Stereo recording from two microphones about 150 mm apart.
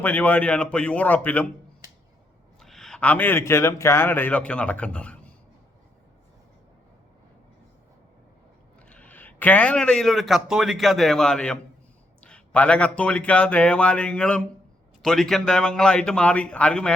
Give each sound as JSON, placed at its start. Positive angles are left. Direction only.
{"t": 0.0, "sound": "speech", "side_deg": 10}
{"t": 2.6, "sound": "a man's voice", "side_deg": 0}
{"t": 8.9, "sound": "speech", "side_deg": 10}